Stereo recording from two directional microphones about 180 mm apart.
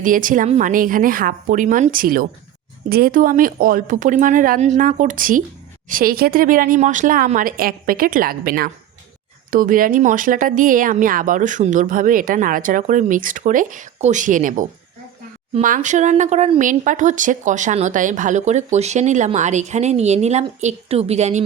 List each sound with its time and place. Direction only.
0.0 s speech: 50° right (ahead or behind)